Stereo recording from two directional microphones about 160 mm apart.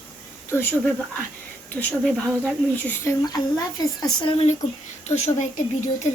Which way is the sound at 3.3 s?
25° left (ahead or behind).